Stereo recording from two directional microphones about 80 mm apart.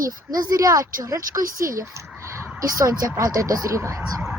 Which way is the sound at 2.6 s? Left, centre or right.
Right.